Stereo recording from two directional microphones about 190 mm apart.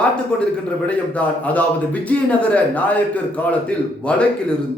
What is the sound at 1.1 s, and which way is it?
Speech, 10° left (ahead or behind).